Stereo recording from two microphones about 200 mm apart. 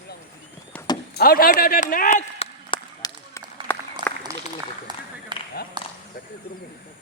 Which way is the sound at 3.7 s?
10° left (ahead or behind).